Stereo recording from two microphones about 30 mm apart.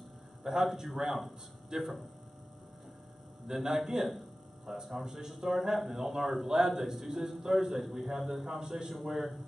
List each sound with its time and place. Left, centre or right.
0.5 s a man's voice: centre
3.4 s a man's voice: centre
4.1 s a sound: centre
5.0 s a man's voice: centre
8.9 s a man's voice: centre